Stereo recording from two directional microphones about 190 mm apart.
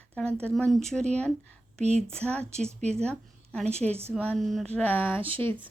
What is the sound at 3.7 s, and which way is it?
Speech, 35° right (ahead or behind).